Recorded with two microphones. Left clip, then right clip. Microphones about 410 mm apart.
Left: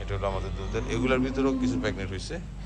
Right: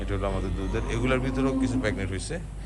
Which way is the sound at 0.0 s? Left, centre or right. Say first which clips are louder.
Right 1 dB; centre.